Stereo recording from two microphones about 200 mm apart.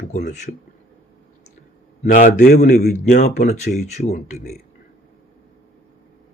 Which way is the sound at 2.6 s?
50° left (ahead or behind).